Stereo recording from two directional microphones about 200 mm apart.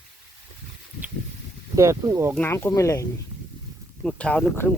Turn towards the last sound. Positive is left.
turn(degrees=10)  # may be behind; listen again after turning